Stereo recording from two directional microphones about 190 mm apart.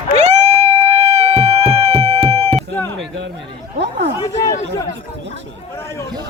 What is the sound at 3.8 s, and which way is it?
Chatter, 65° right (ahead or behind).